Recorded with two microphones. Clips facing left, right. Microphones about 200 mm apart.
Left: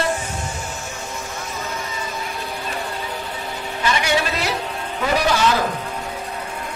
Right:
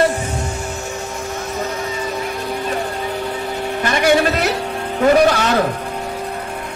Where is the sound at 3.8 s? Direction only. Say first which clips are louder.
Right 6 dB; 50° right (ahead or behind).